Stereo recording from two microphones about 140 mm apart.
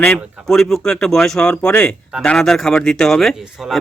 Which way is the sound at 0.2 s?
Centre (ahead or behind).